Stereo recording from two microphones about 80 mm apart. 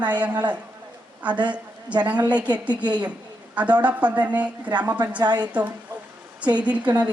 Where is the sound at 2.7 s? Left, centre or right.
Right.